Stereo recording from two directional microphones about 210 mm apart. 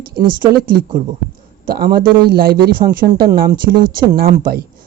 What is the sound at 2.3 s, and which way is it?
Speech, 45° right (ahead or behind).